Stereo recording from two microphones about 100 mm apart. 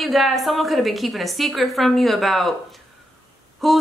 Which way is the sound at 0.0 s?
Centre (ahead or behind).